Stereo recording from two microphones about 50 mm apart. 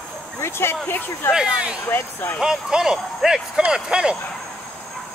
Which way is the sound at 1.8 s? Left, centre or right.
Left.